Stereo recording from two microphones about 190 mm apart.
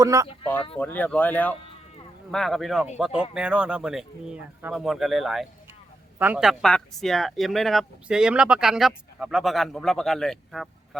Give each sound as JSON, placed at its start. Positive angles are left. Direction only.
{"t": 0.0, "sound": "speech", "side_deg": -15}
{"t": 0.8, "sound": "speech", "side_deg": 10}